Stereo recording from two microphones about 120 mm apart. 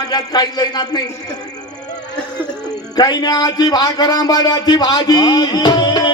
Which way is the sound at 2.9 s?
35° left (ahead or behind).